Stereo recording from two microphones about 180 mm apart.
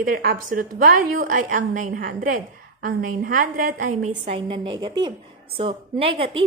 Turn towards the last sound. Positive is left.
turn(degrees=-30)  # may be behind; listen again after turning